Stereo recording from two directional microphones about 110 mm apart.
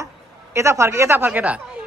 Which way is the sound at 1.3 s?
10° right (ahead or behind).